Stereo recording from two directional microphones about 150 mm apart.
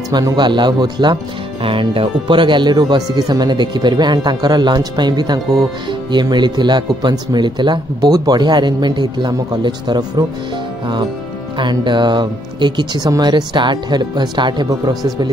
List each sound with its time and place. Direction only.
0.1 s speech: 30° right (ahead or behind)
11.5 s speech: 30° right (ahead or behind)